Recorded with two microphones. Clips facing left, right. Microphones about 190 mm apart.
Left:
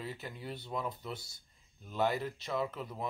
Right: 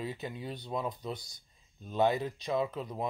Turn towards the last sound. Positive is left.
turn(degrees=-15)  # may be behind; listen again after turning